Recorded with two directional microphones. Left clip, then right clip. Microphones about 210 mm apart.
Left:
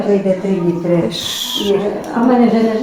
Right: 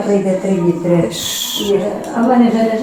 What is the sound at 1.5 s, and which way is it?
Speech, 20° left (ahead or behind).